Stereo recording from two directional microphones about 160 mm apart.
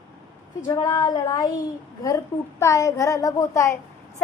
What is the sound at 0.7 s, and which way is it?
A woman's voice, 20° left (ahead or behind).